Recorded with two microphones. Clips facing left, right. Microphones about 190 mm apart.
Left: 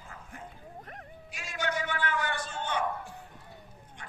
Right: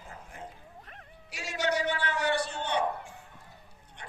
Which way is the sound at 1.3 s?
75° right (ahead or behind).